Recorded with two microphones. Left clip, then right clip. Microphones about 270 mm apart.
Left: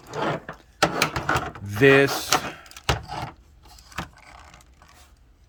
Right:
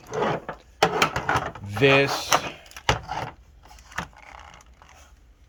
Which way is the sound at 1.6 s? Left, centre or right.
Centre.